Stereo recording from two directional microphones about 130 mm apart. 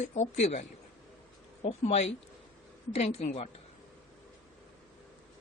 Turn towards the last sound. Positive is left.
turn(degrees=55)  # may be behind; listen again after turning